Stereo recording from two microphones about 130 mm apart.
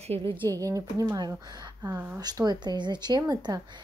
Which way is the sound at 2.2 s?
30° right (ahead or behind).